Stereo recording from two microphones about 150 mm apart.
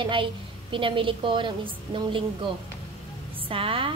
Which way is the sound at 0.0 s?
35° right (ahead or behind).